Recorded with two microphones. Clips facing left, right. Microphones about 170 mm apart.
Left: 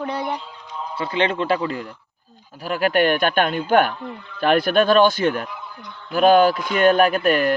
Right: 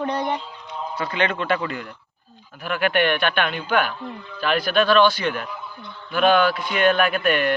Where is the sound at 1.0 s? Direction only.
30° left (ahead or behind).